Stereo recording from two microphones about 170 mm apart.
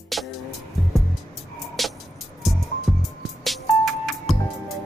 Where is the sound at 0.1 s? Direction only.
Centre (ahead or behind).